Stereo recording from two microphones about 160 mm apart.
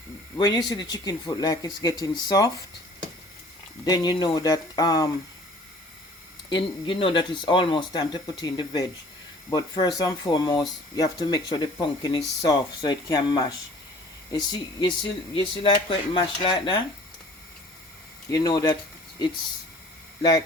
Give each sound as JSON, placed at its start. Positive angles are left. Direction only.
{"t": 0.3, "sound": "speech", "side_deg": 25}
{"t": 3.8, "sound": "speech", "side_deg": 25}
{"t": 6.5, "sound": "speech", "side_deg": 30}
{"t": 18.3, "sound": "speech", "side_deg": 25}